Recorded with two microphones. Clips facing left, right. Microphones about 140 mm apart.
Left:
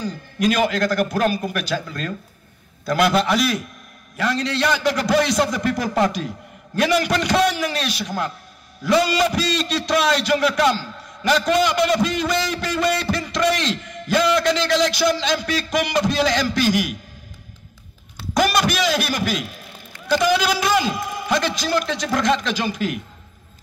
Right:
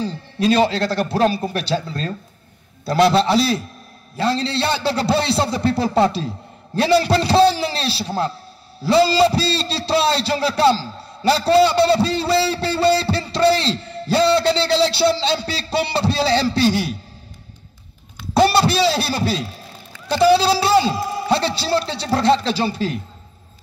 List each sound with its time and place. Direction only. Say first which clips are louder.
0.0 s a man's voice: right 1 dB; 30° right (ahead or behind)
18.3 s a man's voice: right 4 dB; 30° right (ahead or behind)